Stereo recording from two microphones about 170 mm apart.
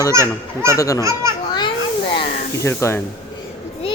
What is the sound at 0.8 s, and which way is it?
Speech, 20° left (ahead or behind).